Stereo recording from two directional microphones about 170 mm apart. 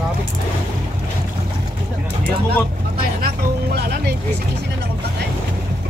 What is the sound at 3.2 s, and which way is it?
Music, 70° right (ahead or behind).